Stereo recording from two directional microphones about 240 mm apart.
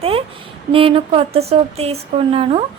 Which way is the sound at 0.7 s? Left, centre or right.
Right.